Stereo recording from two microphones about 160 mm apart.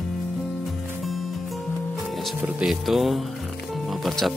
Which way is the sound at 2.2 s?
Centre (ahead or behind).